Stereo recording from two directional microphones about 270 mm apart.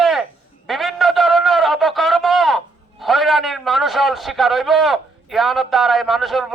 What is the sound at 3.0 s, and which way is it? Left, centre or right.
A man's voice, centre.